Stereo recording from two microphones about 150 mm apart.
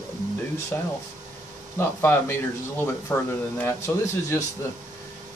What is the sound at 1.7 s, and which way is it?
Speech, 15° left (ahead or behind).